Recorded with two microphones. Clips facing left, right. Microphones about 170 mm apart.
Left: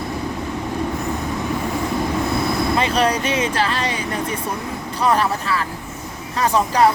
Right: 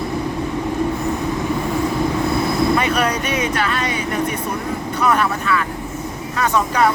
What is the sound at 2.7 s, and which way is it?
Speech, 30° left (ahead or behind).